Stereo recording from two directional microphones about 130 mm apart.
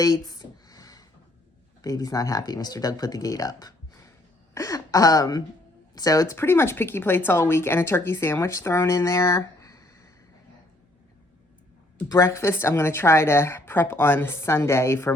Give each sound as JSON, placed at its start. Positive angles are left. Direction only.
{"t": 0.0, "sound": "a sound", "side_deg": 30}
{"t": 1.8, "sound": "speech", "side_deg": 30}
{"t": 12.0, "sound": "speech", "side_deg": 25}